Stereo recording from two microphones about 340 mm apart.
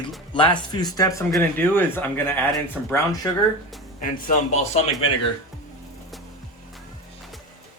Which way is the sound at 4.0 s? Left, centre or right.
Left.